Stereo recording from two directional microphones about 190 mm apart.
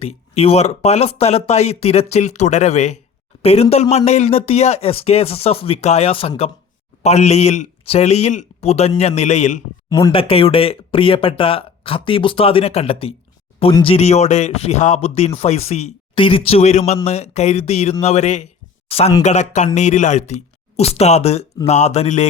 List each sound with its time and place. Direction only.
0.0 s a man's voice: 30° left (ahead or behind)